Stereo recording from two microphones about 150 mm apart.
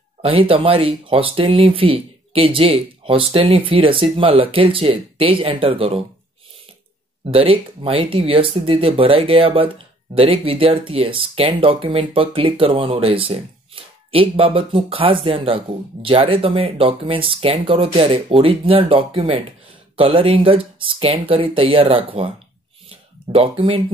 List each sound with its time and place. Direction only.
0.2 s speech: 35° right (ahead or behind)
7.2 s speech: 40° right (ahead or behind)
22.8 s a sound: 40° right (ahead or behind)